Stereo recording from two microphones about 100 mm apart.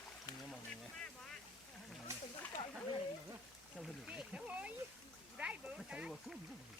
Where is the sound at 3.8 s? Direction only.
10° right (ahead or behind).